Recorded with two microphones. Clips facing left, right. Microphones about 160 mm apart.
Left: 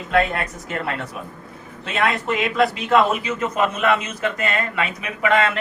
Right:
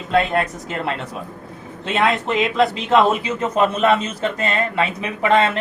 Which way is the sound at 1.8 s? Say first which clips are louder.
Right 3 dB; 30° right (ahead or behind).